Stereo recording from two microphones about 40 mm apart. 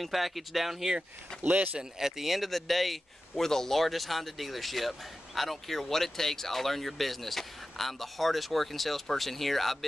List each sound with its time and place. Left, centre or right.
0.0 s speech: centre
1.3 s speech: centre
1.8 s speech: centre